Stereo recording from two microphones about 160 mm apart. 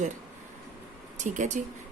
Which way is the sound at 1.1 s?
50° right (ahead or behind).